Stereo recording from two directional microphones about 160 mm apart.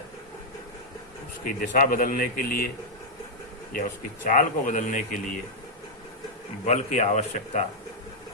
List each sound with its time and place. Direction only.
1.5 s speech: 55° left (ahead or behind)
3.7 s speech: 55° left (ahead or behind)
6.7 s speech: 45° left (ahead or behind)